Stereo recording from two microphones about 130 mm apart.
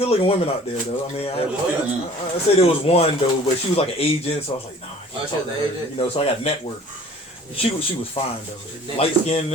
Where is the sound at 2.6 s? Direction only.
50° left (ahead or behind).